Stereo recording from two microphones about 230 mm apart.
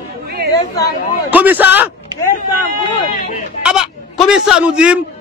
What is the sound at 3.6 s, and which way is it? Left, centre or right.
A man's voice, centre.